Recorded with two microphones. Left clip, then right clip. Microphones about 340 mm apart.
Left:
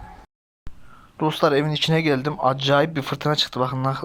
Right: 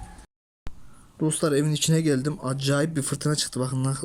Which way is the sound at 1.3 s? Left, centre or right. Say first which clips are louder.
Left 5 dB; centre.